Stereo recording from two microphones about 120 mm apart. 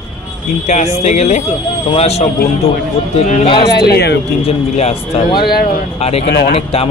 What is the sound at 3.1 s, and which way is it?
Speech, 80° left.